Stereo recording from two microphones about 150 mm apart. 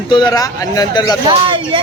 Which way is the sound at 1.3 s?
35° right (ahead or behind).